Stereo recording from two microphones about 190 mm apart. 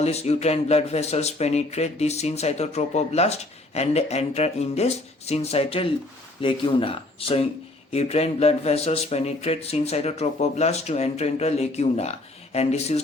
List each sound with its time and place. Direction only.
0.0 s speech: 35° left (ahead or behind)